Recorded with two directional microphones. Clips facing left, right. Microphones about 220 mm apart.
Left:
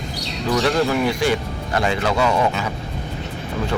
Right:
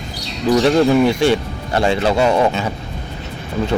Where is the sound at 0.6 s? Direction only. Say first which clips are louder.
Right 6 dB; 25° right (ahead or behind).